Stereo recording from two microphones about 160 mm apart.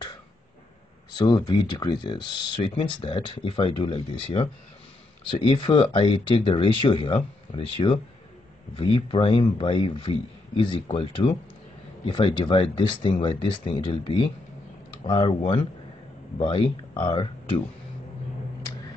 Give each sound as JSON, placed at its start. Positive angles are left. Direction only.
{"t": 1.1, "sound": "speech", "side_deg": 25}